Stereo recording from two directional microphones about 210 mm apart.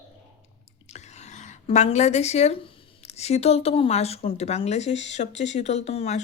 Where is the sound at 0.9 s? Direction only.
30° left (ahead or behind).